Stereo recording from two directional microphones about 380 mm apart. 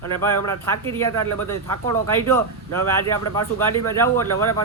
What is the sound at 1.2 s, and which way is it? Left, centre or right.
Speech, right.